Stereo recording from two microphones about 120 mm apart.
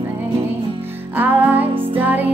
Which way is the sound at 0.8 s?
15° right (ahead or behind).